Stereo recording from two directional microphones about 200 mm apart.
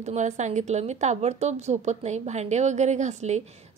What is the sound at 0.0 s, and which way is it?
Speech, 35° right (ahead or behind).